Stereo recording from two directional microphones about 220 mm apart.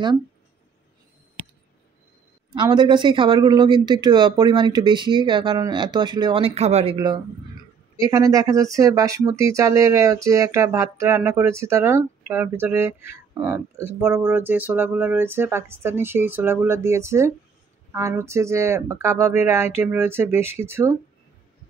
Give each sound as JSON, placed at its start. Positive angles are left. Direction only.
{"t": 2.5, "sound": "speech", "side_deg": -20}